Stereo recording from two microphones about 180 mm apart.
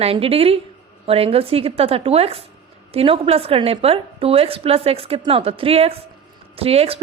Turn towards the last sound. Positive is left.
turn(degrees=-35)  # may be behind; listen again after turning